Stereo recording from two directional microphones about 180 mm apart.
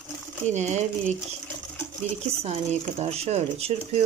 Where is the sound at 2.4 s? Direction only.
35° right (ahead or behind).